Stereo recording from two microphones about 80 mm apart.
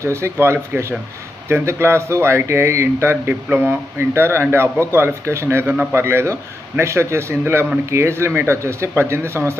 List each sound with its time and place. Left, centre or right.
0.0 s speech: right